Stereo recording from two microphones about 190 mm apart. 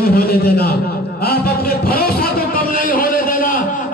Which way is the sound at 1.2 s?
55° left (ahead or behind).